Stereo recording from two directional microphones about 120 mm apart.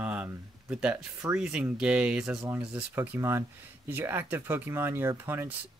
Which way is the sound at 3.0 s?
20° right (ahead or behind).